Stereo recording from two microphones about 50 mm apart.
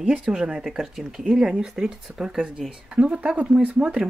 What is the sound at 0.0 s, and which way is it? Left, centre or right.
Speech, centre.